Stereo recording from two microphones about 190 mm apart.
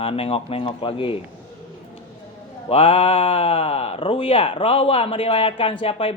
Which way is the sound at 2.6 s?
30° left (ahead or behind).